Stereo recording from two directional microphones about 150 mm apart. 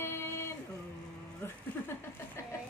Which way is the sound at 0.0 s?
15° left (ahead or behind).